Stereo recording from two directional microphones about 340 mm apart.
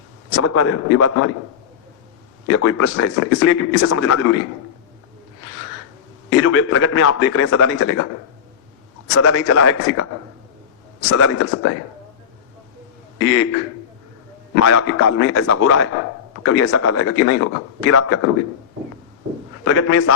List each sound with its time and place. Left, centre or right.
0.3 s speech: left
2.5 s speech: left
6.3 s a man's voice: left
9.1 s a man's voice: left
11.1 s speech: left
13.1 s speech: left
14.5 s speech: left
19.6 s a man's voice: left